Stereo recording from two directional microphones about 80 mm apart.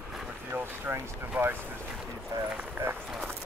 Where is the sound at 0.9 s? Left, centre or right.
Right.